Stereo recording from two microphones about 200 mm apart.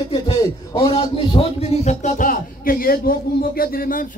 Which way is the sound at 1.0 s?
25° left (ahead or behind).